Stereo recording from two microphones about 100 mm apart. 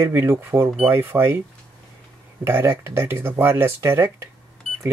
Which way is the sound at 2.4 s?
20° right (ahead or behind).